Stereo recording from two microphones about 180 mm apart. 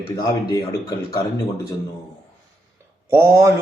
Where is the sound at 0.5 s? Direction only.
20° left (ahead or behind).